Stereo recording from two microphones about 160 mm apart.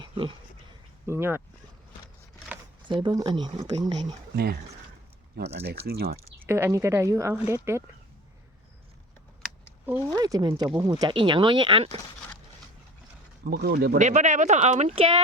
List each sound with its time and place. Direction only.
1.0 s speech: 15° right (ahead or behind)
2.8 s speech: 30° right (ahead or behind)
5.4 s speech: 90° right; by 6.1 s 70° right (ahead or behind)
6.4 s speech: 15° right (ahead or behind)
10.1 s speech: 20° right (ahead or behind)
13.4 s speech: 80° right
14.0 s speech: 50° right (ahead or behind)